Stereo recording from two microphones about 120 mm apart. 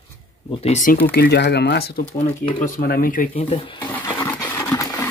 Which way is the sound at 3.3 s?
50° left (ahead or behind).